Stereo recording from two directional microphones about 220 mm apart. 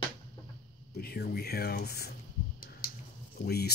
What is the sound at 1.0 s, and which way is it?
Speech, 45° left (ahead or behind).